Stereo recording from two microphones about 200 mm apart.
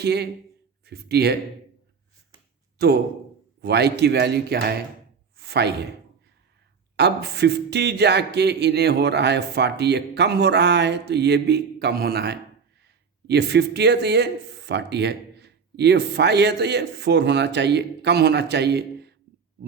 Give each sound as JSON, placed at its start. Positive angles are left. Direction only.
{"t": 0.0, "sound": "speech", "side_deg": -55}
{"t": 2.7, "sound": "speech", "side_deg": -50}
{"t": 5.4, "sound": "a sound", "side_deg": -55}
{"t": 6.9, "sound": "speech", "side_deg": -55}